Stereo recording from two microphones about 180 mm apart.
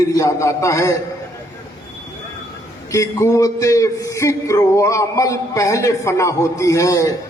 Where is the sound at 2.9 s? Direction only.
15° left (ahead or behind).